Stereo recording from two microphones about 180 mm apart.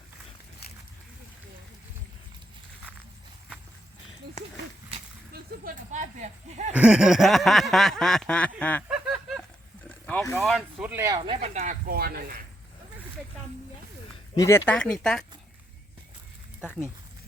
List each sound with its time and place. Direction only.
5.3 s a sound: 60° right (ahead or behind)
5.9 s speech: 40° right (ahead or behind)
6.7 s snicker: 5° right (ahead or behind)
8.9 s a sound: 5° right (ahead or behind)
10.4 s snicker: centre (ahead or behind)
10.9 s speech: 15° right (ahead or behind)
11.2 s speech: 30° right (ahead or behind); by 12.4 s 60° right (ahead or behind)
14.3 s speech: 15° left (ahead or behind)